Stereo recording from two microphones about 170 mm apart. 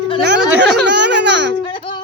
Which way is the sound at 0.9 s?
90° right.